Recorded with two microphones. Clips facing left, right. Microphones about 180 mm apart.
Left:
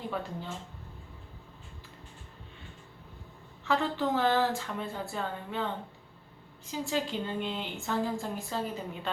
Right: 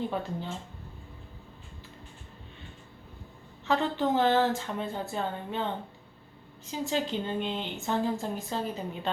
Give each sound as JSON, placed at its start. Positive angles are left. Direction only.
{"t": 0.1, "sound": "speech", "side_deg": -25}
{"t": 3.6, "sound": "speech", "side_deg": -20}